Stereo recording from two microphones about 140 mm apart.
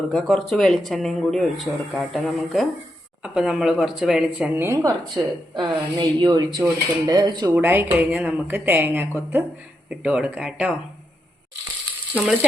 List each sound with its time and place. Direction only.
0.1 s speech: 5° left (ahead or behind); by 4.9 s 20° right (ahead or behind)
5.5 s speech: 35° right (ahead or behind)
7.5 s a woman's voice: 15° right (ahead or behind)
12.1 s a woman's voice: 10° right (ahead or behind)